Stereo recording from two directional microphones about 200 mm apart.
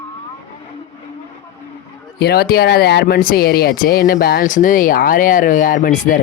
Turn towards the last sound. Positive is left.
turn(degrees=40)  # may be behind; listen again after turning